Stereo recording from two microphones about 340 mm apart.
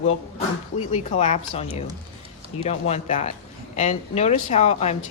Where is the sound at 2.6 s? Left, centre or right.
Centre.